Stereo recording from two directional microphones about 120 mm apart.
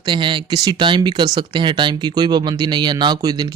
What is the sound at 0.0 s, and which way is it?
Speech, 40° right (ahead or behind).